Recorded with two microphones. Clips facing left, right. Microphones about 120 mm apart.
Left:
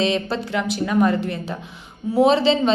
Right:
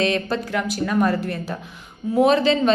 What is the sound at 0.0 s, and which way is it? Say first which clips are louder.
A woman's voice: even; 25° left (ahead or behind).